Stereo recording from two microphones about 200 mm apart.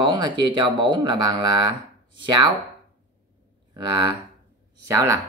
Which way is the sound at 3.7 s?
20° right (ahead or behind).